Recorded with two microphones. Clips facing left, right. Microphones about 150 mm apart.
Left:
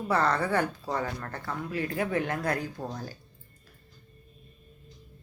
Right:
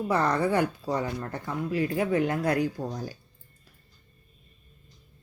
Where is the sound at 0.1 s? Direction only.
15° right (ahead or behind).